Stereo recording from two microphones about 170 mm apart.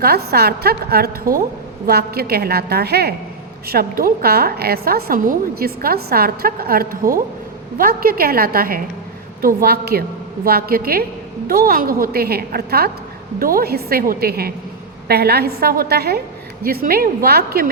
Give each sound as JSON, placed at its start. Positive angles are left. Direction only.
{"t": 0.0, "sound": "a woman's voice", "side_deg": -65}